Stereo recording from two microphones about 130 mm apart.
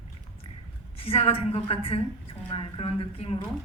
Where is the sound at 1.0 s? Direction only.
50° left (ahead or behind).